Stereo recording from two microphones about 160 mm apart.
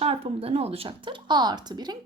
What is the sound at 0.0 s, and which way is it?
A woman's voice, 35° right (ahead or behind).